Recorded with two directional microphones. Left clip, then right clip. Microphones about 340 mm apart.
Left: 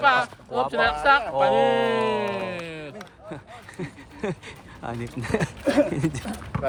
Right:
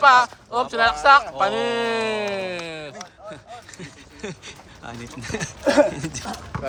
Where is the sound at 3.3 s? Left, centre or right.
Centre.